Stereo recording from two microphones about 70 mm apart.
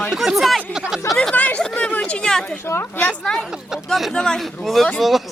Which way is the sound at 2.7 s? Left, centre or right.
Left.